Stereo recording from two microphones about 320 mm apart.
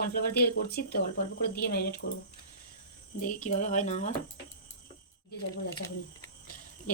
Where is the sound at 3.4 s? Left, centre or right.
Left.